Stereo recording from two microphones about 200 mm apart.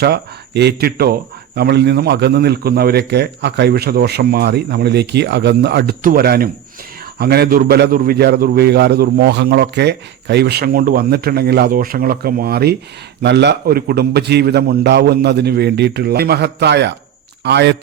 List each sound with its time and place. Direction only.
0.0 s a man's voice: 55° right (ahead or behind)